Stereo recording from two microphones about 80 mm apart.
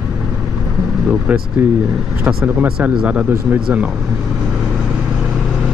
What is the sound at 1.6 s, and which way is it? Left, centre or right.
Speech, right.